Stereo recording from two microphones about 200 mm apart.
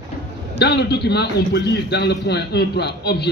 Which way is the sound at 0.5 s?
55° left (ahead or behind).